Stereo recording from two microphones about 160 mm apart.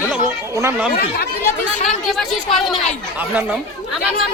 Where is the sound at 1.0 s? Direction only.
70° left (ahead or behind).